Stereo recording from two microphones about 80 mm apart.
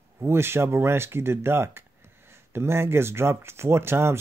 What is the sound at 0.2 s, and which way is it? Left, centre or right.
Speech, right.